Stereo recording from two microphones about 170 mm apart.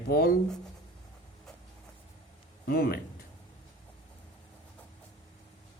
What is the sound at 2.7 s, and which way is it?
Speech, 65° left (ahead or behind).